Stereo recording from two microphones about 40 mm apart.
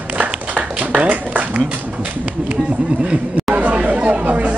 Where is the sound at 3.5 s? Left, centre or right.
Right.